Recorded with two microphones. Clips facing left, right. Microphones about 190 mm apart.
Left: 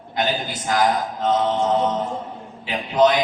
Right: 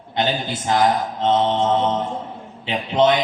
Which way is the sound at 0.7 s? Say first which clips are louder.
Right 2 dB; 25° right (ahead or behind).